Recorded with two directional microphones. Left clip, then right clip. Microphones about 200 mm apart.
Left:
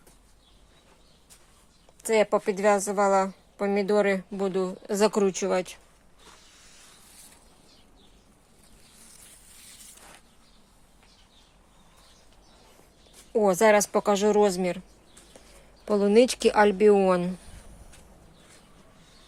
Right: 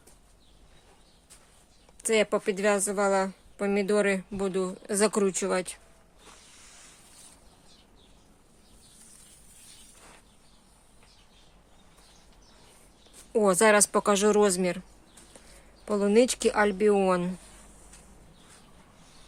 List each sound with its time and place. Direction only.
2.0 s a woman's voice: 10° right (ahead or behind)
6.4 s a sound: 15° right (ahead or behind)
13.3 s a woman's voice: 10° right (ahead or behind)